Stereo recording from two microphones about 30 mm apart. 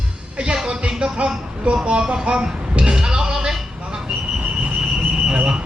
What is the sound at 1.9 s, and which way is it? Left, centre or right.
Music, right.